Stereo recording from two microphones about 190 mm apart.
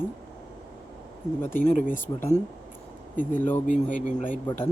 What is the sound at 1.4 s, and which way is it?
Speech, 45° left (ahead or behind).